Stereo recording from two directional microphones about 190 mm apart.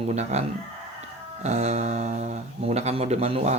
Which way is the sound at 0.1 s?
35° right (ahead or behind).